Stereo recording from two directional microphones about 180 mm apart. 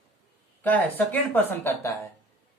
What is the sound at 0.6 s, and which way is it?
Speech, 10° left (ahead or behind).